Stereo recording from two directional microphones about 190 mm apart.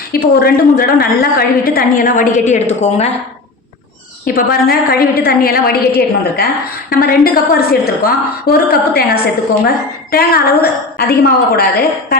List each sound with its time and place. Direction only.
0.1 s a woman's voice: 50° left (ahead or behind)
4.4 s a woman's voice: 50° left (ahead or behind)